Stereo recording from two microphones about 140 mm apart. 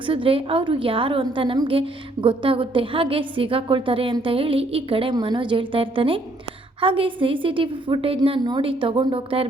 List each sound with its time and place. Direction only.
0.0 s a woman's voice: 40° right (ahead or behind)